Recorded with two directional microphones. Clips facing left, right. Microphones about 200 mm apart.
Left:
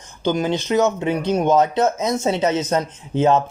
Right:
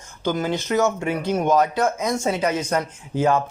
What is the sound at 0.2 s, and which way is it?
Speech, 20° left (ahead or behind).